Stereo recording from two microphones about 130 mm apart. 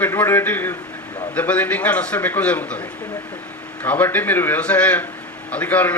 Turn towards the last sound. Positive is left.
turn(degrees=10)  # may be behind; listen again after turning